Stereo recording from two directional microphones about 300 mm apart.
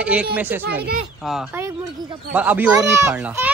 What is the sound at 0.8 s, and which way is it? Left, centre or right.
Speech, right.